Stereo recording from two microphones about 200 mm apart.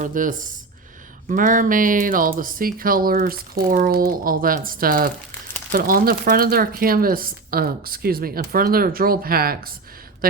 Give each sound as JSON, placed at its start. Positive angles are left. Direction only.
{"t": 0.0, "sound": "speech", "side_deg": -40}